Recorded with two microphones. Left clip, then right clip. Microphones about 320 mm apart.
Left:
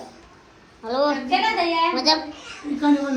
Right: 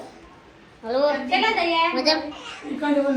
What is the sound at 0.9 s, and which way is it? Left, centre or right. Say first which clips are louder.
A woman's voice: even; centre.